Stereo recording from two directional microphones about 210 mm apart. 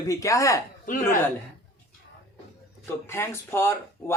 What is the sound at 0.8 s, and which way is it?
Speech, 40° left (ahead or behind).